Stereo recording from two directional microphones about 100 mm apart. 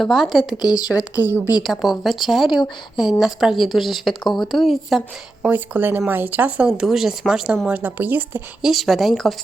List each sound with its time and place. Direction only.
0.0 s a woman's voice: centre (ahead or behind)
0.5 s speech: 45° left (ahead or behind)
1.6 s a woman's voice: centre (ahead or behind)
5.5 s speech: 20° right (ahead or behind)
6.7 s speech: 5° right (ahead or behind)
8.6 s a woman's voice: centre (ahead or behind)